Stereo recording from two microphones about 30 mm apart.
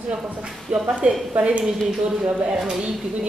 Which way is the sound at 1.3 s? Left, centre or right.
Right.